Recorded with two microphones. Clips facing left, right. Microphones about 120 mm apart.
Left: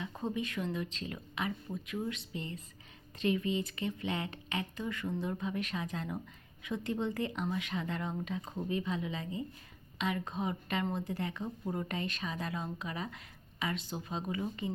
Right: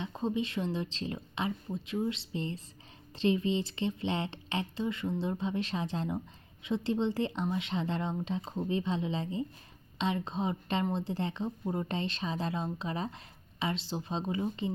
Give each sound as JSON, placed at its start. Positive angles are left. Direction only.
{"t": 0.0, "sound": "a woman's voice", "side_deg": -25}